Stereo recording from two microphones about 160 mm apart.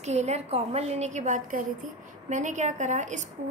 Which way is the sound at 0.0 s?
45° right (ahead or behind).